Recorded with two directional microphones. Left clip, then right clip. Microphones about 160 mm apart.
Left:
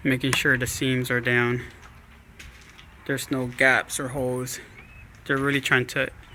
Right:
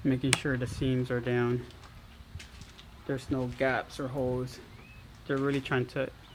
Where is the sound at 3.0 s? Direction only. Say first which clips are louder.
Left 6 dB; 15° left (ahead or behind).